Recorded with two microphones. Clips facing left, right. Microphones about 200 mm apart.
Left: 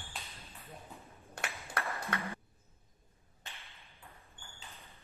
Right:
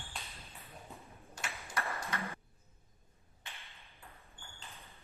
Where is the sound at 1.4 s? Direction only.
55° left (ahead or behind).